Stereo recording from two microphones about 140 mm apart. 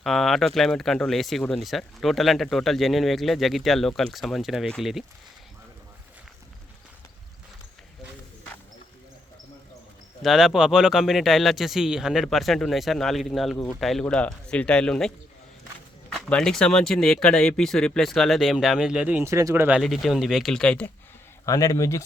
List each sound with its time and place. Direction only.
0.0 s speech: centre (ahead or behind)
10.2 s speech: centre (ahead or behind)
16.1 s speech: 5° left (ahead or behind)
19.3 s speech: 20° right (ahead or behind)
19.8 s speech: centre (ahead or behind)
21.4 s speech: 25° left (ahead or behind)